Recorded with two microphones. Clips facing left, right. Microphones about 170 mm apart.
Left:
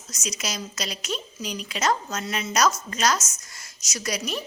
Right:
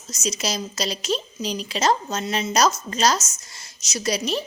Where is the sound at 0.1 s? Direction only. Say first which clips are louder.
Right 6 dB; 30° right (ahead or behind).